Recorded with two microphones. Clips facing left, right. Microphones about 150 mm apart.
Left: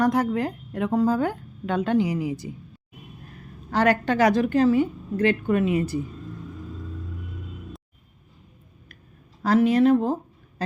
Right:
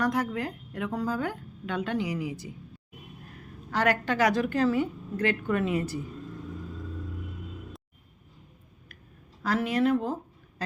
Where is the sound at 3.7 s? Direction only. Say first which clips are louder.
Left 5 dB; 30° left (ahead or behind).